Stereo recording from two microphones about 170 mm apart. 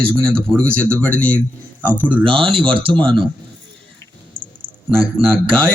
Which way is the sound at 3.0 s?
30° right (ahead or behind).